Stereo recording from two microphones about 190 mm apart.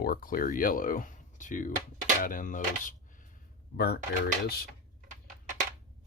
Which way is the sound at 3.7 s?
55° left (ahead or behind).